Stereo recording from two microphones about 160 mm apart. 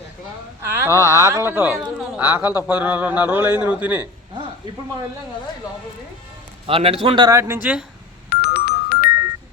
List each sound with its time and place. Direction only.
0.6 s a man's voice: 15° right (ahead or behind)
6.7 s a man's voice: 35° right (ahead or behind)
7.3 s a man's voice: 15° right (ahead or behind)
8.3 s music: 75° left (ahead or behind)